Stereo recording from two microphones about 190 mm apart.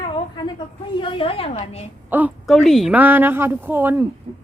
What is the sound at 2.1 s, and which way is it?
A woman's voice, 5° right (ahead or behind).